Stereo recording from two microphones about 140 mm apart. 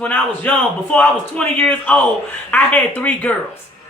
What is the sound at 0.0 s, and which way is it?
Speech, 10° left (ahead or behind).